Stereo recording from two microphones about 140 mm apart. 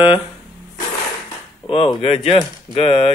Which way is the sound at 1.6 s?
40° left (ahead or behind).